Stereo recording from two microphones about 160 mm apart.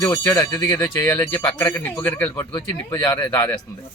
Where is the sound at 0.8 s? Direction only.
10° left (ahead or behind).